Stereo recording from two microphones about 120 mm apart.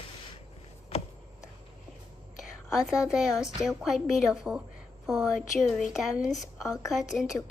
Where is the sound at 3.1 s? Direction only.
5° right (ahead or behind).